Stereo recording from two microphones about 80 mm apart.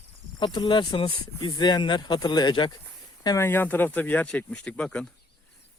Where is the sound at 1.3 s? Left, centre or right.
Left.